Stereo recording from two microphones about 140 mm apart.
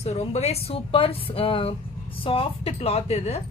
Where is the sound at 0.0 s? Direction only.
50° left (ahead or behind).